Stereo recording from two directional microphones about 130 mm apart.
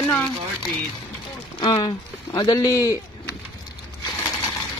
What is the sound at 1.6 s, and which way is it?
Speech, 40° left (ahead or behind).